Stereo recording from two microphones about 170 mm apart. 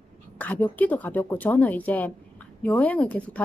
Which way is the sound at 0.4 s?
10° left (ahead or behind).